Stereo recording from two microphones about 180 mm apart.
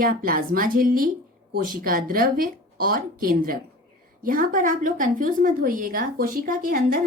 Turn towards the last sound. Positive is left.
turn(degrees=-50)  # may be behind; listen again after turning